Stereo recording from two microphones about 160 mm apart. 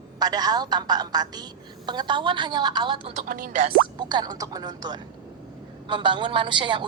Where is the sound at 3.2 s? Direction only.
60° right (ahead or behind).